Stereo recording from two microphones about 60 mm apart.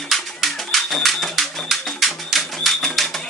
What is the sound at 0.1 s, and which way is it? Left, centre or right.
Music, centre.